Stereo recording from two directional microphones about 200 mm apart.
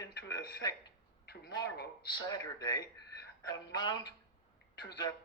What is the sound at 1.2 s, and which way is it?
Speech, 55° left (ahead or behind).